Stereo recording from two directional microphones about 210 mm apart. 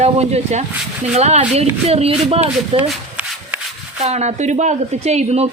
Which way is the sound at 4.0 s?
30° right (ahead or behind).